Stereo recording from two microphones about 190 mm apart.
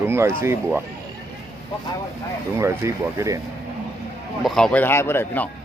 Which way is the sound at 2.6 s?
15° right (ahead or behind).